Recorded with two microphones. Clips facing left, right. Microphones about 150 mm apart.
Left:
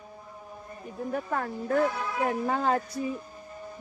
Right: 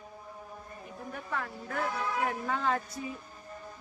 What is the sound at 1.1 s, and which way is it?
A woman's voice, 45° left (ahead or behind).